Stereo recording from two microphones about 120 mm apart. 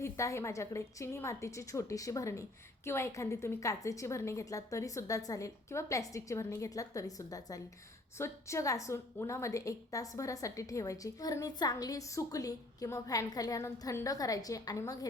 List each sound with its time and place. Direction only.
0.0 s a woman's voice: 25° left (ahead or behind)